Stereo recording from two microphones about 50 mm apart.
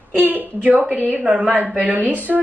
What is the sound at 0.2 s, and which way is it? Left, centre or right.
Speech, right.